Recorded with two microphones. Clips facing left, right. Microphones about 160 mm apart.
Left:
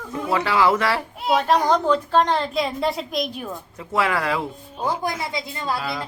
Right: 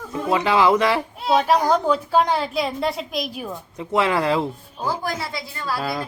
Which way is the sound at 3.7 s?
20° right (ahead or behind).